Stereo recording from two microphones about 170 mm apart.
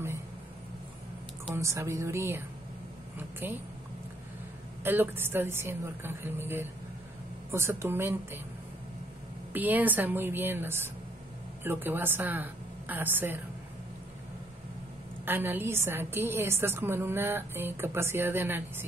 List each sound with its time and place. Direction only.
1.5 s a woman's voice: 15° right (ahead or behind)
4.8 s a woman's voice: 10° right (ahead or behind)
9.5 s a woman's voice: 10° right (ahead or behind)
15.2 s a woman's voice: 10° right (ahead or behind)